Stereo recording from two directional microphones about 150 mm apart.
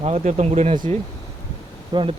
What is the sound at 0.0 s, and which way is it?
Speech, 45° right (ahead or behind).